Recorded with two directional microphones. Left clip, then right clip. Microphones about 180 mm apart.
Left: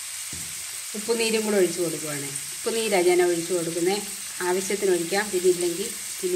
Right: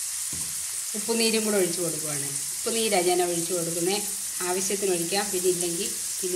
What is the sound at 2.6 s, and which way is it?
Frying, 35° left (ahead or behind).